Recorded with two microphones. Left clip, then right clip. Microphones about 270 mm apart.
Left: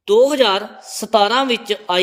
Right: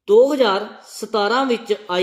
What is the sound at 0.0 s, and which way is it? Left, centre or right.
Speech, left.